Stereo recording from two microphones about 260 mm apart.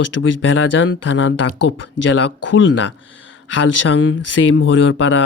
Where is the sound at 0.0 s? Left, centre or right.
Left.